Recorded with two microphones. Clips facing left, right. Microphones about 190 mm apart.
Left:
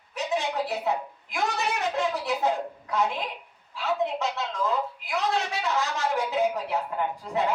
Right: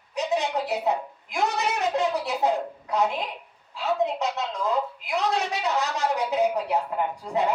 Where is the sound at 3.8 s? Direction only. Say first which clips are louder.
Right 2 dB; 20° right (ahead or behind).